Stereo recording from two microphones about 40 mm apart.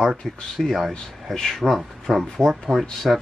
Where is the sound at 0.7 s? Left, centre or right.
Centre.